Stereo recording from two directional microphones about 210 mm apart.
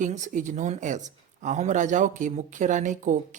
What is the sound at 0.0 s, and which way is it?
Speech, 35° right (ahead or behind).